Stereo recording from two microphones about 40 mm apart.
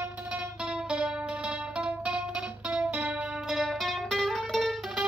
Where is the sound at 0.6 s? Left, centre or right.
Right.